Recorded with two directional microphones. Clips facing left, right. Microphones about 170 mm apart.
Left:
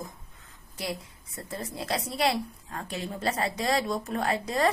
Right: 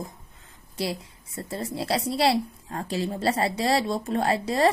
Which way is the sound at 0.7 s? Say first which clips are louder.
Right 5 dB; 30° right (ahead or behind).